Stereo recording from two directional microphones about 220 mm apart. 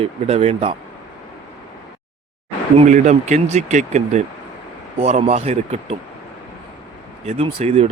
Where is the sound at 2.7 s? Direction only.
30° right (ahead or behind).